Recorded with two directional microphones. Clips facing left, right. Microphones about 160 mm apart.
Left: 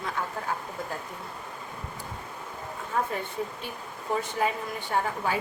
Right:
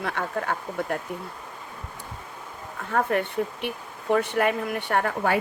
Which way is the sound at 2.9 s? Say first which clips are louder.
Right 6 dB; 70° right (ahead or behind).